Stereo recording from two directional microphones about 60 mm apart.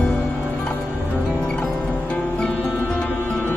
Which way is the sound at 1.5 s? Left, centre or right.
Centre.